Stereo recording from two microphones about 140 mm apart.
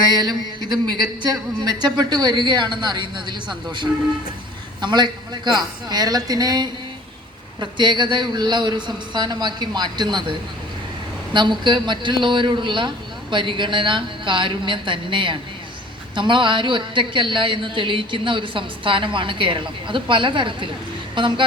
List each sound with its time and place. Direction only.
0.1 s a woman's voice: 30° right (ahead or behind)
11.3 s a woman's voice: 35° right (ahead or behind)